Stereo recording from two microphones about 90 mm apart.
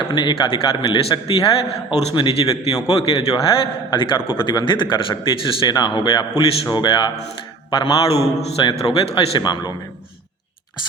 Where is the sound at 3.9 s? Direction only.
60° left (ahead or behind).